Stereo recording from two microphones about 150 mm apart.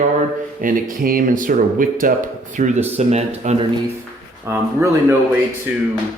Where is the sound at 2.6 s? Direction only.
50° right (ahead or behind).